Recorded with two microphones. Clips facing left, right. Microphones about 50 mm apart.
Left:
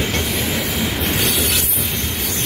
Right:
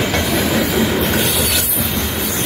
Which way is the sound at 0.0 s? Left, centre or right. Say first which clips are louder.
Right 4 dB; right.